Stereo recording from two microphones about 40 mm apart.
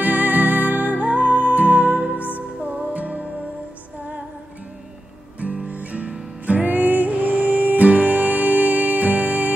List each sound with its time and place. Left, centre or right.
0.0 s music: right
5.4 s guitar: right
6.4 s music: right